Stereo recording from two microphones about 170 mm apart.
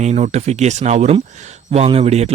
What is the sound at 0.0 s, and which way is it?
Speech, 40° right (ahead or behind).